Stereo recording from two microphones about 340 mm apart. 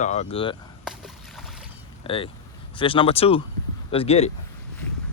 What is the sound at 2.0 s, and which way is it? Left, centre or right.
Speech, centre.